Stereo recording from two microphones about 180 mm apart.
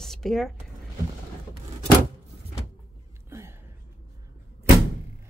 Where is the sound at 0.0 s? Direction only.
Centre (ahead or behind).